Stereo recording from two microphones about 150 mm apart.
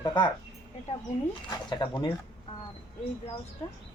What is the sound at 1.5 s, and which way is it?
Speech, 30° left (ahead or behind).